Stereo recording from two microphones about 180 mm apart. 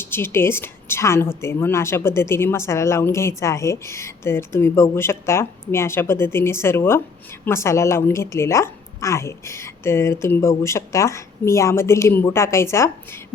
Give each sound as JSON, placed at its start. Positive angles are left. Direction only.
{"t": 0.0, "sound": "a woman's voice", "side_deg": 10}